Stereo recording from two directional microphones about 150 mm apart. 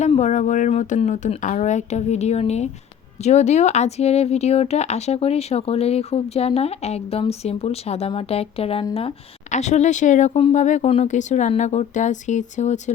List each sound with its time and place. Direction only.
0.0 s speech: 50° left (ahead or behind)